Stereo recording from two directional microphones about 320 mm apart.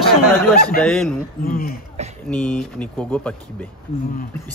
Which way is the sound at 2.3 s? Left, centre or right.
Centre.